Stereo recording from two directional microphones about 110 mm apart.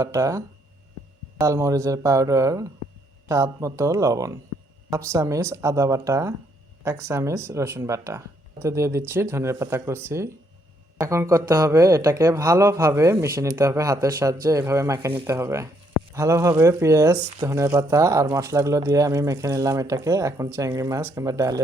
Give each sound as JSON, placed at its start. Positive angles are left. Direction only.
{"t": 0.0, "sound": "speech", "side_deg": -30}